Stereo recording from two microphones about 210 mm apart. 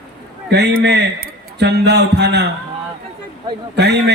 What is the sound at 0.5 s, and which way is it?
A man's voice, 50° right (ahead or behind).